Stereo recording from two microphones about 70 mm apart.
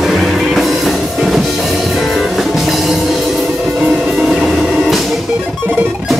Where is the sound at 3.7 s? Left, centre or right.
Centre.